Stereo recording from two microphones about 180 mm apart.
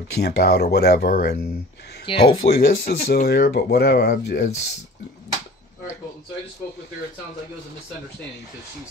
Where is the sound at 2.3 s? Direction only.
75° left (ahead or behind).